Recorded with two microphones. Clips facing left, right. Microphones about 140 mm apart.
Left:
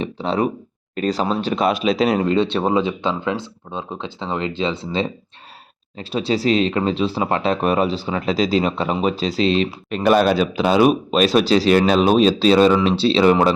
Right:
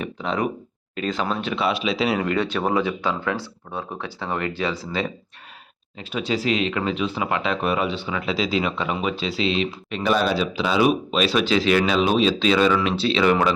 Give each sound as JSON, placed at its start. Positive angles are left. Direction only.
{"t": 0.0, "sound": "speech", "side_deg": 30}
{"t": 2.2, "sound": "speech", "side_deg": 25}